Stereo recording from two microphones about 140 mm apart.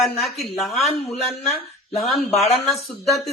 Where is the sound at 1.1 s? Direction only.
50° left (ahead or behind).